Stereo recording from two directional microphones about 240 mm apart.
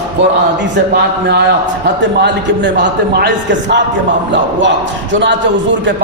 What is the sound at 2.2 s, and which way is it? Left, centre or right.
Speech, right.